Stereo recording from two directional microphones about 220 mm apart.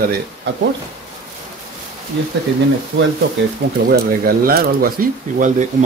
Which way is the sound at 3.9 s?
45° right (ahead or behind).